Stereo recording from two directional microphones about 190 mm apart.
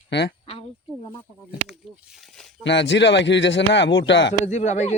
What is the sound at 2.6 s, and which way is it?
A man's voice, 70° left (ahead or behind).